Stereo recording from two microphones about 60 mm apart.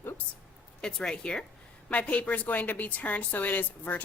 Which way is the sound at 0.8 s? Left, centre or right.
Centre.